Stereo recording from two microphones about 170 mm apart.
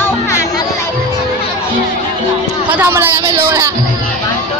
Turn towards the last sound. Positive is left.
turn(degrees=-15)  # may be behind; listen again after turning